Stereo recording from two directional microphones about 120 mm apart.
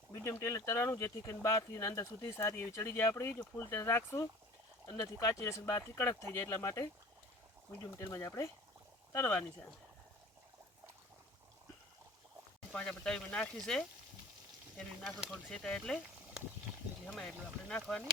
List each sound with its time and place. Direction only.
0.1 s speech: 25° left (ahead or behind)
7.9 s speech: 30° left (ahead or behind)
12.7 s speech: 10° left (ahead or behind)